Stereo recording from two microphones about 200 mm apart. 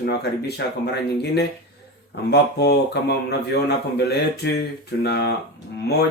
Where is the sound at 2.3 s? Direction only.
55° left (ahead or behind).